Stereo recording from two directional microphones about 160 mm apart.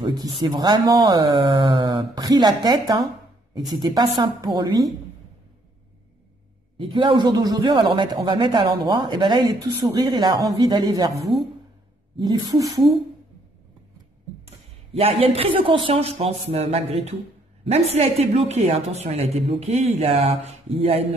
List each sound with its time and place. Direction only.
0.0 s speech: 25° right (ahead or behind)
6.8 s speech: 30° right (ahead or behind)
12.2 s speech: 25° right (ahead or behind)
14.9 s a woman's voice: 40° right (ahead or behind)